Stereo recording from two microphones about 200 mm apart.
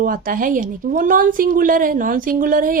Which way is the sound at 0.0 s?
45° right (ahead or behind).